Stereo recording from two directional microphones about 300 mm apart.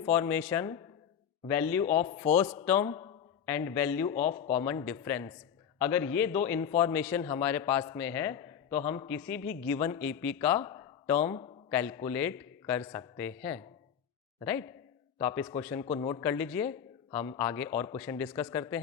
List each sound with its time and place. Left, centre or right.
0.0 s a man's voice: centre
4.2 s speech: left
4.5 s a man's voice: centre
11.3 s a man's voice: centre
11.7 s a man's voice: centre